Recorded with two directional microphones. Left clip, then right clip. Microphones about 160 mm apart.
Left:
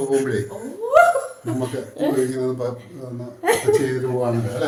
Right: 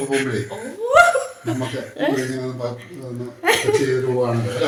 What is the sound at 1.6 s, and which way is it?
Speech, centre (ahead or behind).